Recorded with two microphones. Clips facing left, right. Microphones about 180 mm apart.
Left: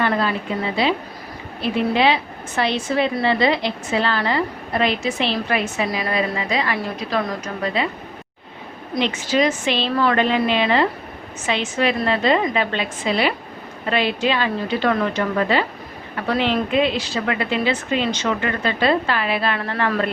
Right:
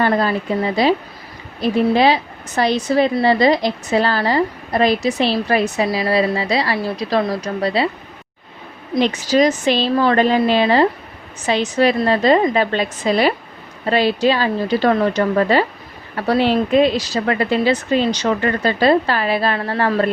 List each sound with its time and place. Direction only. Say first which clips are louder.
0.0 s a woman's voice: right 4 dB; 40° right (ahead or behind)
9.0 s a woman's voice: right 4 dB; 40° right (ahead or behind)